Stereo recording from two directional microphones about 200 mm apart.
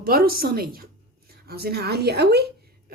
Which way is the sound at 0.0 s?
50° right (ahead or behind).